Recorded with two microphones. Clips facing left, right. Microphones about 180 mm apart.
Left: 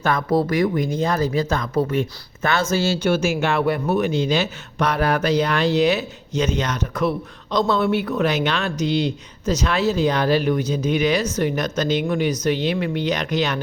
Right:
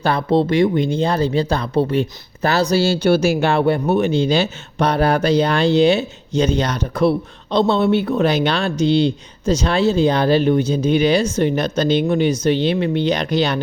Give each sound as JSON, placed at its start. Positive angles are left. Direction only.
{"t": 0.0, "sound": "speech", "side_deg": -30}